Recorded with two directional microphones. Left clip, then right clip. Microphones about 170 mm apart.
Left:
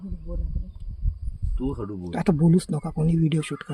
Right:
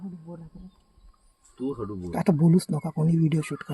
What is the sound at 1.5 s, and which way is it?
Speech, 60° left (ahead or behind).